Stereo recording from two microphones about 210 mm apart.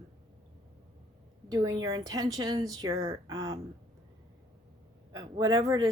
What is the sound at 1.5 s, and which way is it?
A woman's voice, 20° right (ahead or behind).